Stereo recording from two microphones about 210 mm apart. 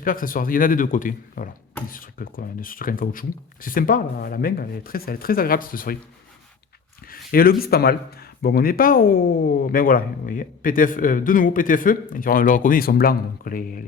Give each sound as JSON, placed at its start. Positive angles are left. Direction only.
{"t": 0.0, "sound": "speech", "side_deg": 40}
{"t": 7.1, "sound": "speech", "side_deg": 45}